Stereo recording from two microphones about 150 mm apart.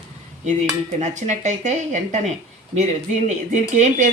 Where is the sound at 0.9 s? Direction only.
55° right (ahead or behind).